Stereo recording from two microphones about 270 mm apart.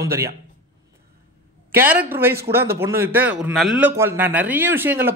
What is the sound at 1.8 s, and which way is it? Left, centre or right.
A man's voice, centre.